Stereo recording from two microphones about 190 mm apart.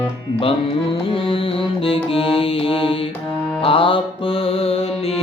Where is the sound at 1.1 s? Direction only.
30° left (ahead or behind).